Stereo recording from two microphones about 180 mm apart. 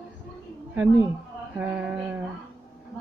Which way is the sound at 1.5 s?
5° right (ahead or behind).